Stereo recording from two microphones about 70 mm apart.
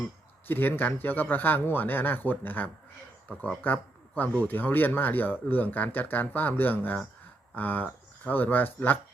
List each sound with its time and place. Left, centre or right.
0.4 s speech: left